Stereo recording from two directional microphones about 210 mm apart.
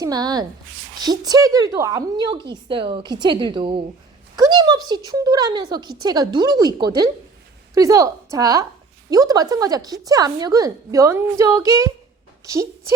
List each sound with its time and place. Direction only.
0.0 s a woman's voice: 20° right (ahead or behind)